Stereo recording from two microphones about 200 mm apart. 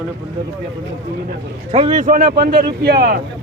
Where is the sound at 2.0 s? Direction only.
45° right (ahead or behind).